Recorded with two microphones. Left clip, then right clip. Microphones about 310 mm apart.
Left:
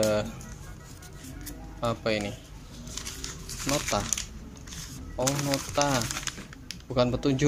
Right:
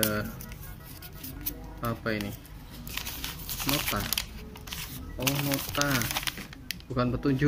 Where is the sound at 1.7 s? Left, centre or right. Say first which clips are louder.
Left 4 dB; centre.